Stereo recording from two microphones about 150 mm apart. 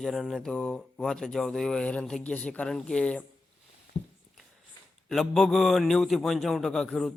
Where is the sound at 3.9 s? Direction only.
45° left (ahead or behind).